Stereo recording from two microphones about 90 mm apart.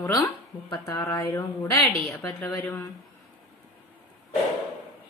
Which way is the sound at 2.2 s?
25° left (ahead or behind).